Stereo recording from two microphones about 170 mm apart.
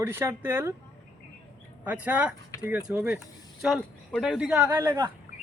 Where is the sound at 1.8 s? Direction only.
10° right (ahead or behind).